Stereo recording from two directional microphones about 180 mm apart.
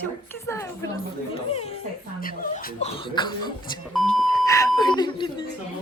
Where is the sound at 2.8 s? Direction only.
30° left (ahead or behind).